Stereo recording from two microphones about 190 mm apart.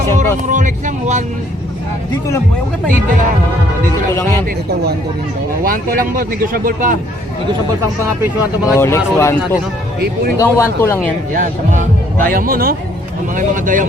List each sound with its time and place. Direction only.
0.4 s a sound: 40° right (ahead or behind)
4.1 s speech: 15° left (ahead or behind)
5.6 s speech: 50° right (ahead or behind)
8.6 s speech: 15° left (ahead or behind)
11.3 s speech: 45° right (ahead or behind)